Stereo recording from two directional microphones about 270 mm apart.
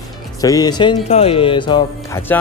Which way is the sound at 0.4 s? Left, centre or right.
Centre.